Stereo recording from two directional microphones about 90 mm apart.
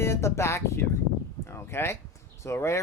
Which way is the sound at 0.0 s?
30° left (ahead or behind).